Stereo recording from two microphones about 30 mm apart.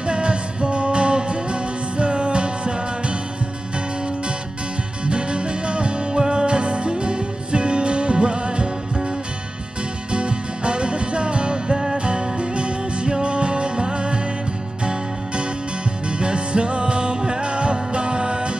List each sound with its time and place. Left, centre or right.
0.0 s music: right
5.0 s music: right
10.1 s music: right
16.1 s music: right